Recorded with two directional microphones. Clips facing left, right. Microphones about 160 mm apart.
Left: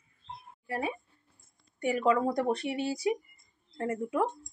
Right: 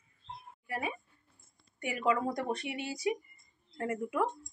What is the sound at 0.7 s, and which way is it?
Speech, 30° left (ahead or behind).